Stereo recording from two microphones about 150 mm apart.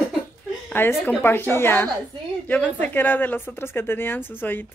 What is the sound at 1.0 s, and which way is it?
Speech, 15° left (ahead or behind).